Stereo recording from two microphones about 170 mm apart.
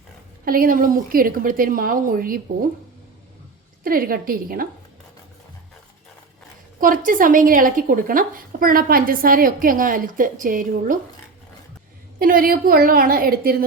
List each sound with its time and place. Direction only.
0.4 s a woman's voice: 55° right (ahead or behind)
3.8 s a woman's voice: 60° right (ahead or behind)
6.7 s a woman's voice: 50° right (ahead or behind)
12.2 s a woman's voice: 55° right (ahead or behind)